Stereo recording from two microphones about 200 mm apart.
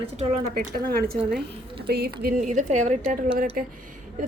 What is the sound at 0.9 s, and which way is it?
A woman's voice, 50° right (ahead or behind).